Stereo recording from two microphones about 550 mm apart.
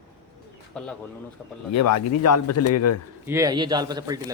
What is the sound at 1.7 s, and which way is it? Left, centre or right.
A man's voice, left.